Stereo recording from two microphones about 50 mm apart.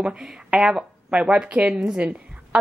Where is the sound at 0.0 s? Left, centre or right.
Centre.